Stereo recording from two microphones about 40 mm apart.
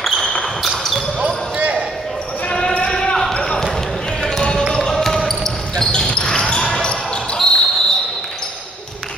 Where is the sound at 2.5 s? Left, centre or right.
Left.